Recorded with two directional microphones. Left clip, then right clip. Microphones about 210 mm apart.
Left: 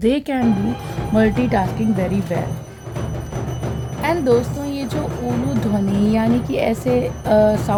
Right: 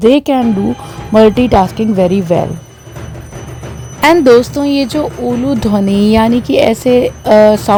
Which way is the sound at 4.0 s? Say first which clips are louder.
Right 11 dB; 45° right (ahead or behind).